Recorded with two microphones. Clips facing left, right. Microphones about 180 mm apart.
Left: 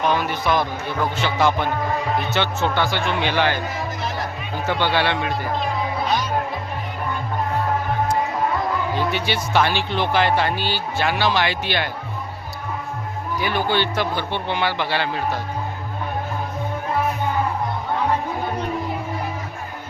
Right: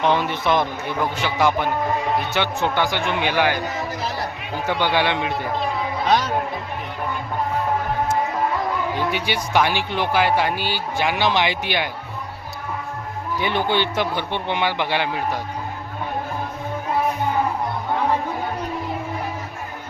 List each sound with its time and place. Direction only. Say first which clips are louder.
0.0 s speech: right 1 dB; 25° right (ahead or behind)
4.6 s speech: even; 15° right (ahead or behind)
9.0 s speech: left 1 dB; 15° right (ahead or behind)
13.4 s speech: even; 20° right (ahead or behind)